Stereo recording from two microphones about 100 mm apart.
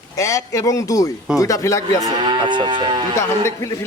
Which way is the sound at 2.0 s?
50° right (ahead or behind).